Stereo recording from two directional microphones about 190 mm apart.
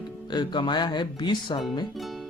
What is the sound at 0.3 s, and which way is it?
Speech, 25° left (ahead or behind).